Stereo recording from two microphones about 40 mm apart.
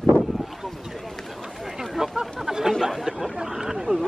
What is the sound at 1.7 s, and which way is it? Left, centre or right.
Chatter, centre.